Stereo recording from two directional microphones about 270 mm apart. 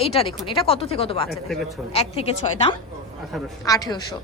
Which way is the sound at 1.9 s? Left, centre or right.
Left.